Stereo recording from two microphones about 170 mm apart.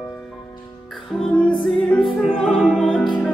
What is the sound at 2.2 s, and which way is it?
Opera, centre (ahead or behind).